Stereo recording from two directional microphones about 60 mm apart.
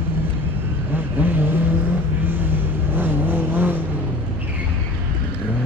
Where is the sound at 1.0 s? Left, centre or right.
Right.